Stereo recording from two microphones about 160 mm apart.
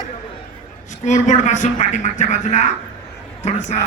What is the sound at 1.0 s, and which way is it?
A man's voice, 50° left (ahead or behind).